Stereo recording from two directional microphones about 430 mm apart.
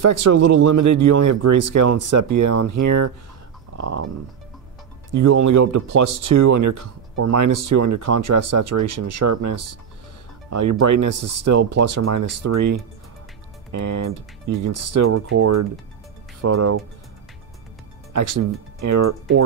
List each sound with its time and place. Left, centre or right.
0.0 s speech: right
5.1 s speech: right
18.1 s speech: right